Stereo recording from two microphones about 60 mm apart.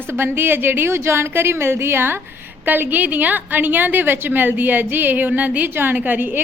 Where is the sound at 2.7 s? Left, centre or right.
Right.